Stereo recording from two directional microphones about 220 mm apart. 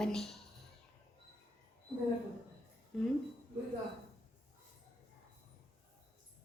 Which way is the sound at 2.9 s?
Centre (ahead or behind).